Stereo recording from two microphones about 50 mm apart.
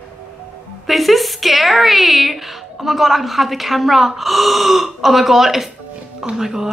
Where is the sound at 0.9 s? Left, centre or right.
Centre.